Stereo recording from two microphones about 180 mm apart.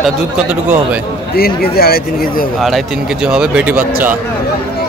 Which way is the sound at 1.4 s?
60° left (ahead or behind).